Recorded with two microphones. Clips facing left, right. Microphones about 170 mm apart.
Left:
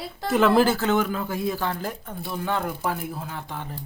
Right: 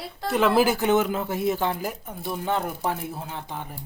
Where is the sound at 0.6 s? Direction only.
15° right (ahead or behind).